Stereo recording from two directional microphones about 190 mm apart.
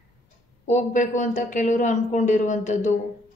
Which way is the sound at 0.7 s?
40° left (ahead or behind).